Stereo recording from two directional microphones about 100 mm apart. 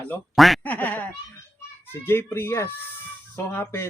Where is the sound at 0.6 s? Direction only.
15° left (ahead or behind).